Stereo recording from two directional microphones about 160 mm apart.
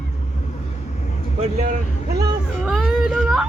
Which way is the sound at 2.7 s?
Centre (ahead or behind).